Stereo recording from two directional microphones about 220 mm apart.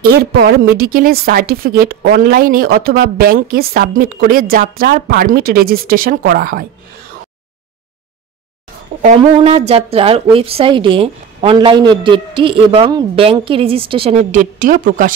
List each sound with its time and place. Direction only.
0.0 s a woman's voice: 45° right (ahead or behind)
9.0 s a woman's voice: 30° right (ahead or behind)